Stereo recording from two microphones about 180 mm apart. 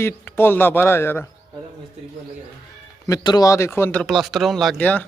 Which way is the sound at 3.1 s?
20° left (ahead or behind).